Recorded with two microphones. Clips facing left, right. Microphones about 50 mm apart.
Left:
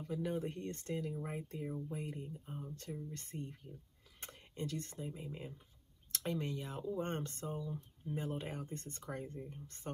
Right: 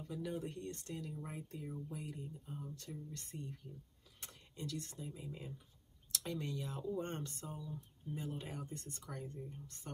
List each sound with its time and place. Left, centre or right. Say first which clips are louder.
0.1 s speech: left 4 dB; left